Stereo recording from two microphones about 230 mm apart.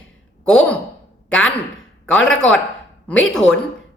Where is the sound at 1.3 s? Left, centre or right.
Centre.